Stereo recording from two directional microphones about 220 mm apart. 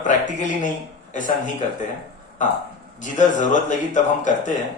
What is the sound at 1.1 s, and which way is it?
Speech, 35° left (ahead or behind).